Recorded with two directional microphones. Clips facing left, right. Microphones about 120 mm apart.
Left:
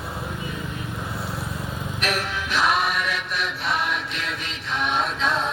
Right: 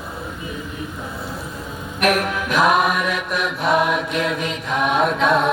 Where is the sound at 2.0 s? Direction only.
50° right (ahead or behind).